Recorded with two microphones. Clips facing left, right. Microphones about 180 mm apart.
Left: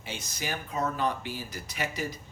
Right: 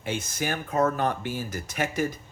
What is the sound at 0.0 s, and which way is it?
Speech, 50° right (ahead or behind).